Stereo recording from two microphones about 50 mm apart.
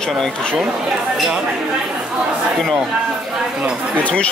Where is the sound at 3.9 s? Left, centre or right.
Left.